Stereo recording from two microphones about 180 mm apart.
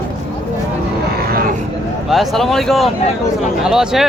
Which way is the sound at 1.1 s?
60° right (ahead or behind).